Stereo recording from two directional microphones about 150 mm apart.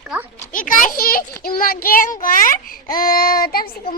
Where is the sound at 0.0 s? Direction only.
5° right (ahead or behind).